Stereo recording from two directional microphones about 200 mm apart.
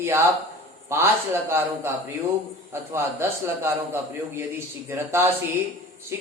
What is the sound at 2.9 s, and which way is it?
A man's voice, 10° right (ahead or behind).